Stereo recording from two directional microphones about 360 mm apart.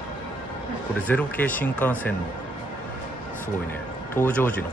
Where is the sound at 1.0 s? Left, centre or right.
Centre.